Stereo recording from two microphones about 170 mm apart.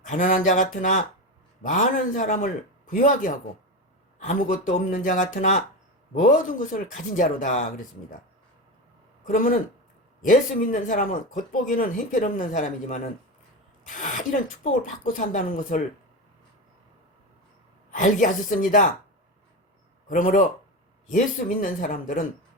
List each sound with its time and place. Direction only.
0.0 s speech: 50° left (ahead or behind)
9.2 s speech: 50° left (ahead or behind)
17.9 s speech: 50° left (ahead or behind)
20.1 s speech: 55° left (ahead or behind)